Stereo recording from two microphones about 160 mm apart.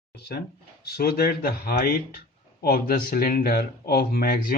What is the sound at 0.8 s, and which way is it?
Speech, 75° left (ahead or behind).